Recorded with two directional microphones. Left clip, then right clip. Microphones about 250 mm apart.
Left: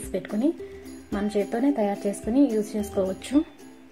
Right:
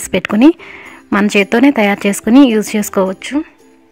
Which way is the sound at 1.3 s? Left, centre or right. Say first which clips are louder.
Right 13 dB; right.